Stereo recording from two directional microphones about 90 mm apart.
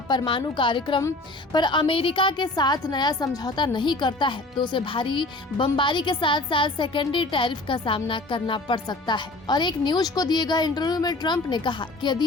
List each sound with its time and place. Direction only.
0.3 s a woman's voice: 70° left (ahead or behind)